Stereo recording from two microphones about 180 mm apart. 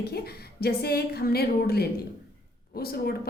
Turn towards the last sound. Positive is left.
turn(degrees=60)  # may be behind; listen again after turning